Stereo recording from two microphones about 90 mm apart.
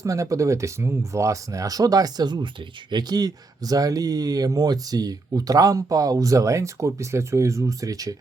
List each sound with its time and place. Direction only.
0.0 s speech: 35° right (ahead or behind)